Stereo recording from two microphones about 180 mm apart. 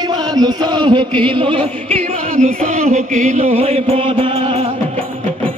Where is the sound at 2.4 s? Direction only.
40° right (ahead or behind).